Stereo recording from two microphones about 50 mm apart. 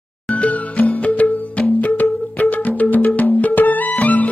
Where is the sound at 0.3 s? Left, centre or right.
Left.